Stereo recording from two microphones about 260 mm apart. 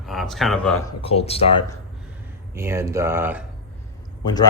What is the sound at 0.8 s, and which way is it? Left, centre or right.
Speech, left.